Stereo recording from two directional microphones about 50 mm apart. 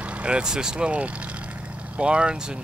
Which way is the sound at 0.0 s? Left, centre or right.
Right.